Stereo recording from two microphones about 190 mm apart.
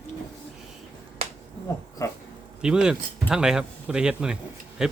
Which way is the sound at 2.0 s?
15° left (ahead or behind).